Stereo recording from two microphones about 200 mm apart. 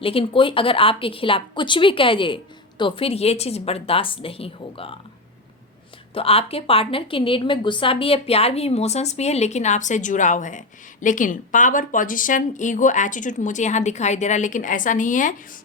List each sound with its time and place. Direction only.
0.0 s speech: 25° left (ahead or behind)
6.1 s a woman's voice: 30° left (ahead or behind)